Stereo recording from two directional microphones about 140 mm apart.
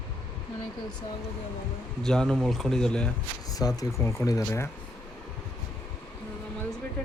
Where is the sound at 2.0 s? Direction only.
5° left (ahead or behind).